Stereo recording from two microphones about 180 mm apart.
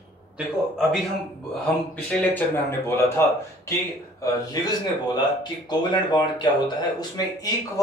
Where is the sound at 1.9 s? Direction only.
10° left (ahead or behind).